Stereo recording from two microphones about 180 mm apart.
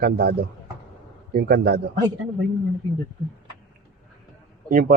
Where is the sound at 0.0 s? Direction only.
60° right (ahead or behind).